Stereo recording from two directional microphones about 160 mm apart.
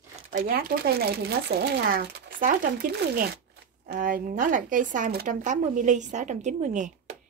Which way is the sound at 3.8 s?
60° right (ahead or behind).